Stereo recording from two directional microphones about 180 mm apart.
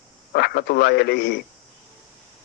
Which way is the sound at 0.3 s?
65° left (ahead or behind).